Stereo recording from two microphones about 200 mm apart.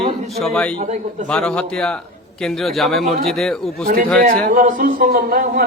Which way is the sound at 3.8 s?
45° right (ahead or behind).